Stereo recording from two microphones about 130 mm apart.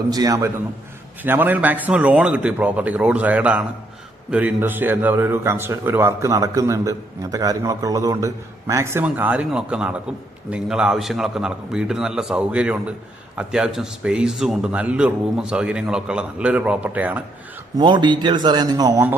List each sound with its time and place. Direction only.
0.1 s a man's voice: 30° right (ahead or behind); by 17.2 s 10° right (ahead or behind)
17.7 s speech: 35° right (ahead or behind)